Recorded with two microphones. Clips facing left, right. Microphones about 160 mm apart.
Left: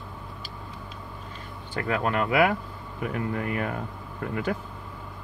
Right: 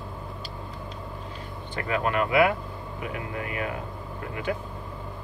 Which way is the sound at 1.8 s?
40° left (ahead or behind).